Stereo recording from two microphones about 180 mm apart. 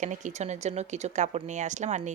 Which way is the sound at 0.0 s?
45° right (ahead or behind).